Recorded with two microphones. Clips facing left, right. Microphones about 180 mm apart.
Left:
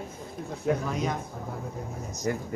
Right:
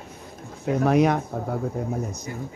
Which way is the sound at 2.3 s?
65° left (ahead or behind).